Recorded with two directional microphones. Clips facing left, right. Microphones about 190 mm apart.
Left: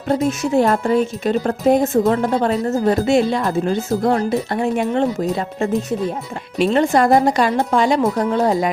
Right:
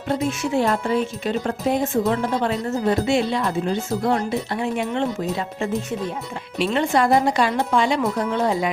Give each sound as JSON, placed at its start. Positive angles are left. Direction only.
{"t": 0.3, "sound": "speech", "side_deg": 45}
{"t": 6.6, "sound": "speech", "side_deg": 45}